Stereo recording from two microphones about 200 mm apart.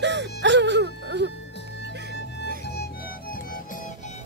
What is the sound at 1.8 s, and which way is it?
Music, 60° left (ahead or behind).